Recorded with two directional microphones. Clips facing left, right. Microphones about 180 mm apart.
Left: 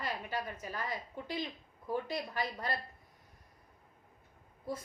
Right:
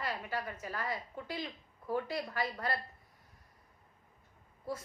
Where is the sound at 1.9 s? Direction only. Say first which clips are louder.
Right 1 dB; 20° left (ahead or behind).